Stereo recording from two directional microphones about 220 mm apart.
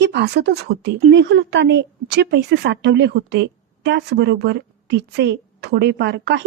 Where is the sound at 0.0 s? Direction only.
50° right (ahead or behind).